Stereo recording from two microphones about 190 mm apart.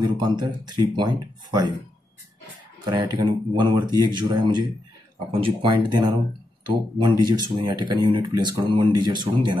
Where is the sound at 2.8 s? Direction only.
25° right (ahead or behind).